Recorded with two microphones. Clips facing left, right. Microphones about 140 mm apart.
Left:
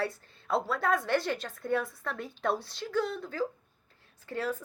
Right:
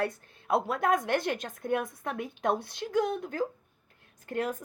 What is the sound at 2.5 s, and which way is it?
Speech, 55° right (ahead or behind).